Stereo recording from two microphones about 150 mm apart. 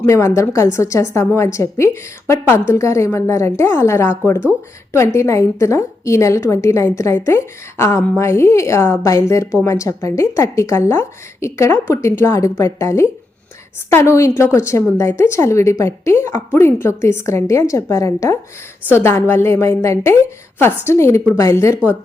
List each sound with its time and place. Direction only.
0.1 s a woman's voice: 20° left (ahead or behind)